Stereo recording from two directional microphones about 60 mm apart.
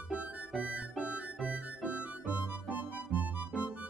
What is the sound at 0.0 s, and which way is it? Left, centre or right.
Music, right.